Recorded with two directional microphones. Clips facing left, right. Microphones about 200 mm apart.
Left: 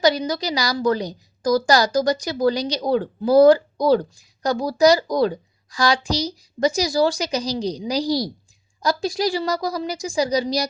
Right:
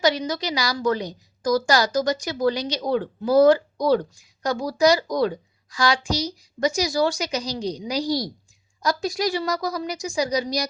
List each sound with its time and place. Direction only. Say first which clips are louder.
0.0 s a woman's voice: left 3 dB; 35° left (ahead or behind)